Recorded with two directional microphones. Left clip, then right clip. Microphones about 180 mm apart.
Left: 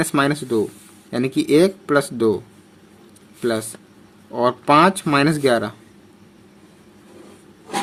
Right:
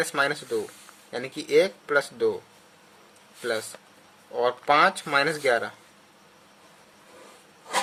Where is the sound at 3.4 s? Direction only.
35° left (ahead or behind).